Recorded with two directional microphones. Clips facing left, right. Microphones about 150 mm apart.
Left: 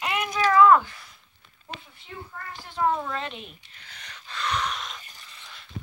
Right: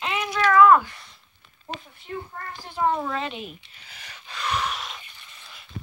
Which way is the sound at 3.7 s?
10° right (ahead or behind).